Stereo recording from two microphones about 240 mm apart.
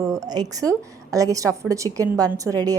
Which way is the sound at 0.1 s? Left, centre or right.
Centre.